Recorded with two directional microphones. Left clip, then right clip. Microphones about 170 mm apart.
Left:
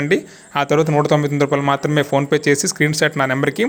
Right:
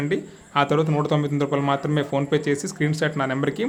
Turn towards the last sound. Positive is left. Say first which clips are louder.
# left 7 dB
turn(degrees=20)  # may be behind; listen again after turning